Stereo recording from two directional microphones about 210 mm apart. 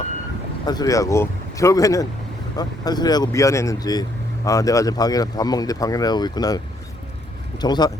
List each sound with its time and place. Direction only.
0.6 s speech: 20° left (ahead or behind)
7.6 s speech: 20° left (ahead or behind)